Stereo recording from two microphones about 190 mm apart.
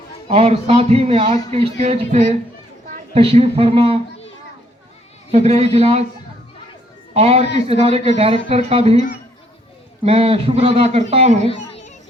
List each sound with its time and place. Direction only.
0.3 s a man's voice: 30° right (ahead or behind)
5.3 s a man's voice: 35° right (ahead or behind)
7.1 s a man's voice: 30° right (ahead or behind)
11.4 s a sound: 30° left (ahead or behind)